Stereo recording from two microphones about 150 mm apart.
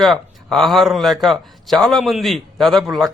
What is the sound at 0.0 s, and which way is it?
A man's voice, centre (ahead or behind).